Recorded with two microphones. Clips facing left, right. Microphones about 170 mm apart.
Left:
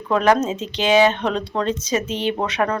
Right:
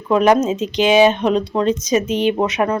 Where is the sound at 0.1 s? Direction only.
15° right (ahead or behind).